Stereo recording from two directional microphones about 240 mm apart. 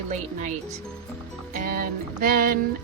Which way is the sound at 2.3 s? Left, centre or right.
Right.